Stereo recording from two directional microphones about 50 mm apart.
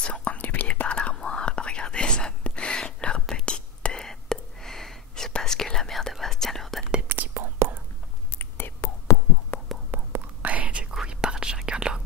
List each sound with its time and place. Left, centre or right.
0.0 s whispering: left
0.7 s whispering: left; by 6.9 s centre
7.3 s whispering: right
8.4 s whispering: left
8.8 s whispering: left
9.5 s a sound: left
9.9 s whispering: right
11.1 s whispering: centre